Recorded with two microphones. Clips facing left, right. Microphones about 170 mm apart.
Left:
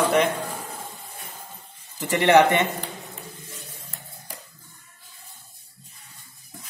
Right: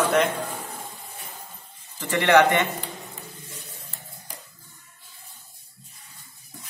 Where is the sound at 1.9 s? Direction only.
20° left (ahead or behind).